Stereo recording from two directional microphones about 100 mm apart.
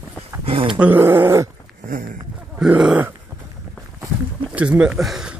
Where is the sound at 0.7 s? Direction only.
15° right (ahead or behind).